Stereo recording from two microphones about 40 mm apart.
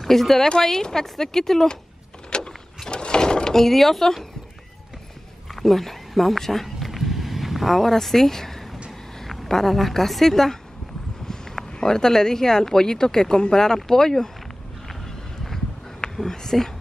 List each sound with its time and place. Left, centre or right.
0.0 s speech: centre
2.3 s a sound: left
3.5 s speech: centre
5.6 s a sound: centre
9.2 s a woman's voice: centre
16.2 s speech: centre